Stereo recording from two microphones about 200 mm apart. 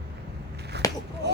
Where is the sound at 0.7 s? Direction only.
55° right (ahead or behind).